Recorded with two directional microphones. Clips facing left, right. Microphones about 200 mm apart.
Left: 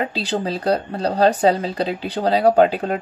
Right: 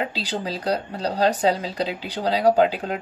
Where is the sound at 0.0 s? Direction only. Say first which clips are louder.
Left 4 dB; 50° left (ahead or behind).